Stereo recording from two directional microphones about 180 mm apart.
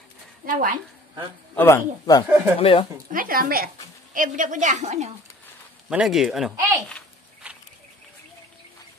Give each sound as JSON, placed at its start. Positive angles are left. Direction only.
{"t": 0.5, "sound": "speech", "side_deg": -50}
{"t": 1.6, "sound": "a man's voice", "side_deg": 15}
{"t": 2.2, "sound": "speech", "side_deg": -10}
{"t": 2.6, "sound": "speech", "side_deg": 30}
{"t": 3.1, "sound": "speech", "side_deg": -50}
{"t": 5.9, "sound": "speech", "side_deg": -5}
{"t": 7.4, "sound": "a sound", "side_deg": -5}